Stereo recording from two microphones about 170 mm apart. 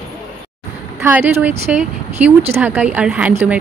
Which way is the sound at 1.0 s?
10° right (ahead or behind).